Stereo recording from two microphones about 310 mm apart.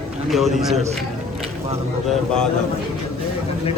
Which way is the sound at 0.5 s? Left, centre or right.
Right.